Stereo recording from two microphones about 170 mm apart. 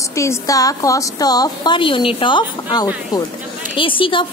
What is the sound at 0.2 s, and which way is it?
A woman's voice, 20° left (ahead or behind).